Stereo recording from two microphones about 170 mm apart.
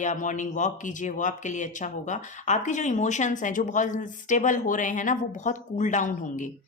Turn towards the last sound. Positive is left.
turn(degrees=50)  # may be behind; listen again after turning